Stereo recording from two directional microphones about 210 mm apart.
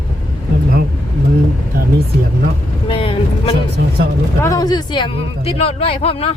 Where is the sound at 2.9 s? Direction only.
25° left (ahead or behind).